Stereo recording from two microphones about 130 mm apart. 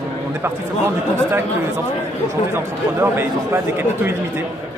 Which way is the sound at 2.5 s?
20° right (ahead or behind).